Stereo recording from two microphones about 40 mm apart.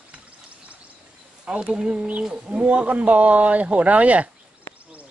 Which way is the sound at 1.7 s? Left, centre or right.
Centre.